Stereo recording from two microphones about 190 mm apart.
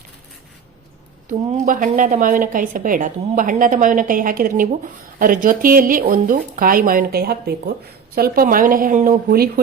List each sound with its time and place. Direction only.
1.3 s a woman's voice: 45° right (ahead or behind)